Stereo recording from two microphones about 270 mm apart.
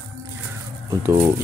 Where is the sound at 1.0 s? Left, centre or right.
Centre.